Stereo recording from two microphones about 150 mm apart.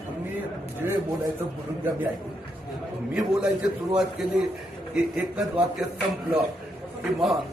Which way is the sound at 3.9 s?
5° right (ahead or behind).